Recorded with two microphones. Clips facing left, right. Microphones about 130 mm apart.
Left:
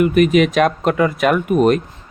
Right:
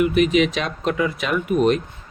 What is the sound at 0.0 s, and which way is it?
Speech, 50° left (ahead or behind).